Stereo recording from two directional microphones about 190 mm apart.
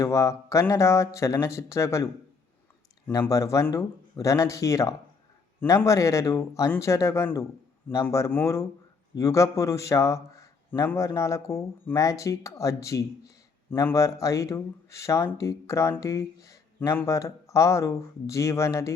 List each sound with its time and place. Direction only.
0.0 s a man's voice: 15° left (ahead or behind)
3.1 s a man's voice: 15° left (ahead or behind)